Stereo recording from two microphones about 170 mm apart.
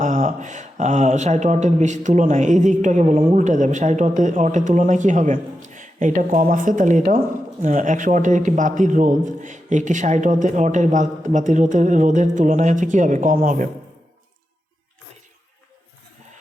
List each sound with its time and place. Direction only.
0.0 s a man's voice: 50° right (ahead or behind)